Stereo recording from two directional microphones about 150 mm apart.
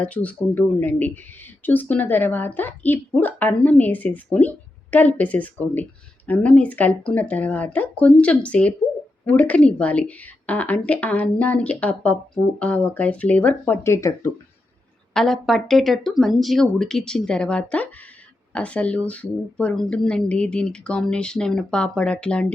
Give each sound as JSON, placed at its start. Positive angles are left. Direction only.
{"t": 0.0, "sound": "speech", "side_deg": 10}
{"t": 15.1, "sound": "speech", "side_deg": 0}